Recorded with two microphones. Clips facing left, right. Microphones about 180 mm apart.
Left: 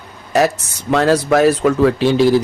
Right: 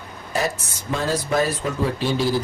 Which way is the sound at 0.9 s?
75° left (ahead or behind).